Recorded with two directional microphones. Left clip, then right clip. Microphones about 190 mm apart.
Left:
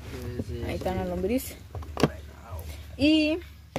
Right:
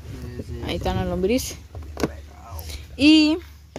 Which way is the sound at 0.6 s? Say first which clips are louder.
Right 5 dB; 50° right (ahead or behind).